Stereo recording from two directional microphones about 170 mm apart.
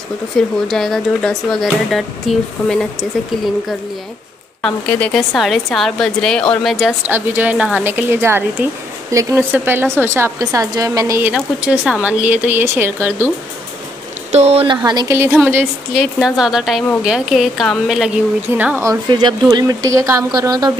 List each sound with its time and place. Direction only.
0.3 s a woman's voice: 5° left (ahead or behind)
4.6 s a woman's voice: 5° left (ahead or behind)
7.1 s speech: 10° right (ahead or behind)
14.3 s speech: 40° right (ahead or behind)
14.8 s speech: 20° right (ahead or behind)
15.3 s a woman's voice: 5° right (ahead or behind)
18.6 s speech: 15° right (ahead or behind)